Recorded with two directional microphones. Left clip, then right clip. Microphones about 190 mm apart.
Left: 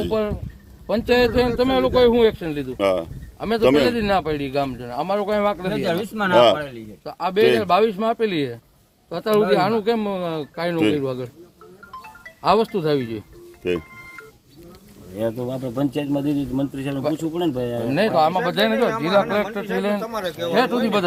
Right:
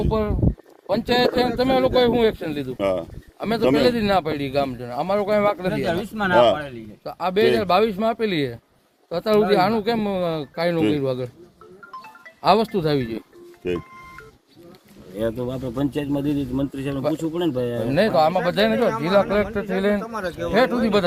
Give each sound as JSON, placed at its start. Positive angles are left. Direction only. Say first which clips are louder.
{"t": 0.1, "sound": "a man's voice", "louder": "even", "side_deg": -45}
{"t": 2.7, "sound": "a man's voice", "louder": "left 3 dB", "side_deg": -5}
{"t": 3.8, "sound": "a man's voice", "louder": "right 1 dB", "side_deg": -50}
{"t": 5.7, "sound": "speech", "louder": "left 1 dB", "side_deg": 40}
{"t": 7.0, "sound": "a man's voice", "louder": "left 1 dB", "side_deg": -50}
{"t": 10.8, "sound": "a man's voice", "louder": "left 4 dB", "side_deg": 0}
{"t": 11.0, "sound": "speech", "louder": "right 2 dB", "side_deg": -60}
{"t": 12.4, "sound": "speech", "louder": "even", "side_deg": -60}
{"t": 13.6, "sound": "a man's voice", "louder": "left 2 dB", "side_deg": -5}
{"t": 15.1, "sound": "a man's voice", "louder": "even", "side_deg": -5}
{"t": 17.9, "sound": "a man's voice", "louder": "even", "side_deg": -50}